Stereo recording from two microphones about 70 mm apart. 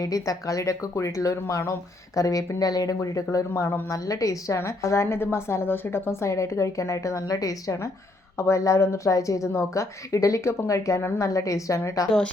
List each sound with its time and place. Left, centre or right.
0.0 s a woman's voice: left
3.3 s a woman's voice: left
3.9 s a woman's voice: left
8.4 s a woman's voice: left